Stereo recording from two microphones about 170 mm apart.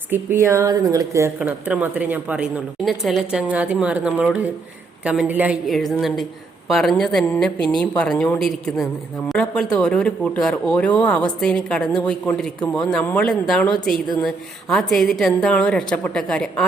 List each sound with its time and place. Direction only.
0.1 s a woman's voice: 15° right (ahead or behind)
1.4 s a woman's voice: 10° right (ahead or behind)